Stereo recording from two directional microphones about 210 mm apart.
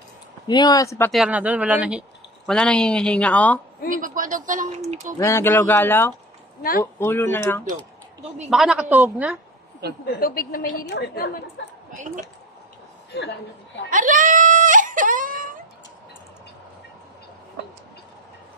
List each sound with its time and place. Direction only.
0.5 s speech: 20° left (ahead or behind)
1.1 s speech: 5° right (ahead or behind)
3.9 s a man's voice: 40° right (ahead or behind)
5.2 s speech: 15° left (ahead or behind)
8.5 s speech: centre (ahead or behind)
10.2 s a woman's voice: 45° left (ahead or behind)
13.8 s a sound: 40° right (ahead or behind)